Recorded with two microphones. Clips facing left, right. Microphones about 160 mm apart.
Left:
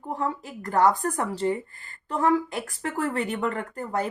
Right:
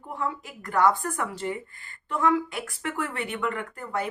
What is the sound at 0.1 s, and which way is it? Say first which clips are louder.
Speech: left 3 dB; 35° left (ahead or behind).